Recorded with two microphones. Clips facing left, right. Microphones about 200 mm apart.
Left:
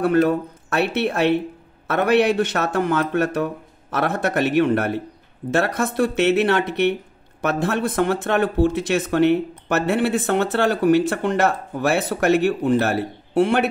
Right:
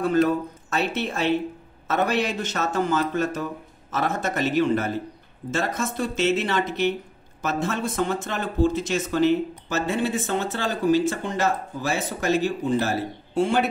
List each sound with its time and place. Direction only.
0.0 s speech: 65° left (ahead or behind)